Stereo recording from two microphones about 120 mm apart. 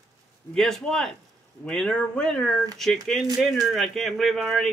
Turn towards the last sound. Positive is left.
turn(degrees=0)  # may be behind; listen again after turning